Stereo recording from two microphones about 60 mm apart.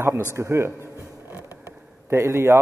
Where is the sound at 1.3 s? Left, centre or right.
Right.